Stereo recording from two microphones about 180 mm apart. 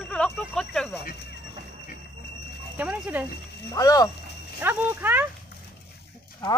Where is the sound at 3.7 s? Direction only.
20° left (ahead or behind).